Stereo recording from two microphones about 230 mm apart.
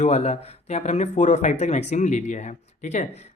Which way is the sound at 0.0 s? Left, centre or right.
Left.